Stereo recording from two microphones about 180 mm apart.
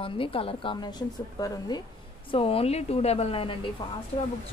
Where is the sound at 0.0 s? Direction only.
30° left (ahead or behind).